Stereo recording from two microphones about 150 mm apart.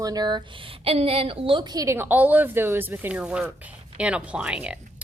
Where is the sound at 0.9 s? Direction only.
40° right (ahead or behind); by 4.8 s 5° right (ahead or behind).